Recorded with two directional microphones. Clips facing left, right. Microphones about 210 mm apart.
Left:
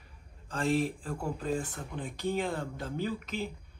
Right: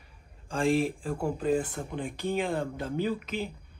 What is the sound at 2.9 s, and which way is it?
Speech, 15° right (ahead or behind).